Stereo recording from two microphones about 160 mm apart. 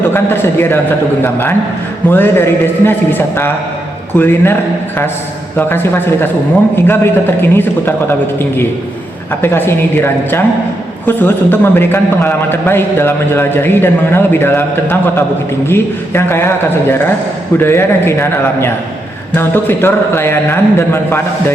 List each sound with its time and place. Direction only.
0.1 s a man's voice: 15° left (ahead or behind)
5.5 s a man's voice: 15° left (ahead or behind)
9.4 s a man's voice: 15° left (ahead or behind)